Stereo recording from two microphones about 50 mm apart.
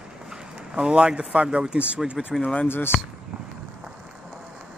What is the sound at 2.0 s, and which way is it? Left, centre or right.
Speech, centre.